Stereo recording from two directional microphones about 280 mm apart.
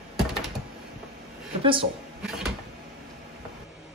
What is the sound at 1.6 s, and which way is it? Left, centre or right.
Speech, centre.